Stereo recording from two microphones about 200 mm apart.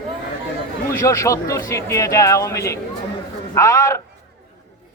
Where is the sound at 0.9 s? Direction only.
15° left (ahead or behind).